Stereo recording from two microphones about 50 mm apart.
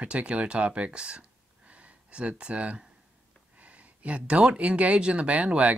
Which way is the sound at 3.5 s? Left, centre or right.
Right.